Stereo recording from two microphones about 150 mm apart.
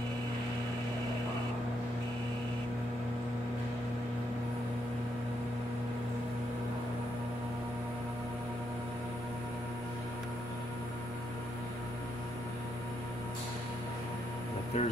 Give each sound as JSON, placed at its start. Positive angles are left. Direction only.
{"t": 14.7, "sound": "music", "side_deg": 50}